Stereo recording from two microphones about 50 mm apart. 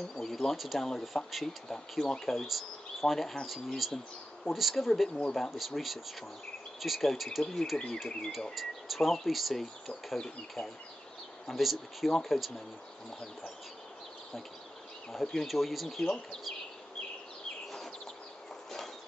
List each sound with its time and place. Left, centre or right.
0.1 s speech: centre
5.1 s speech: centre
5.4 s speech: centre
8.5 s speech: centre
11.4 s speech: centre
15.1 s speech: centre